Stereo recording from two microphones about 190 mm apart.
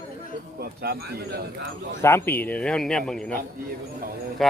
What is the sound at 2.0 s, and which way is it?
Speech, 15° left (ahead or behind).